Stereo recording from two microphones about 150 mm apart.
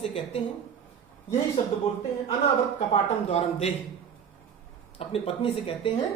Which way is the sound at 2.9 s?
45° left (ahead or behind).